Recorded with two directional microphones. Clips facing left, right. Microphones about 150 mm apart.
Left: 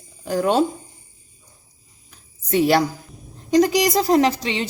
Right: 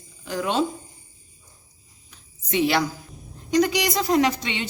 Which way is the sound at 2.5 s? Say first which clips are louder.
Left 5 dB; 40° left (ahead or behind).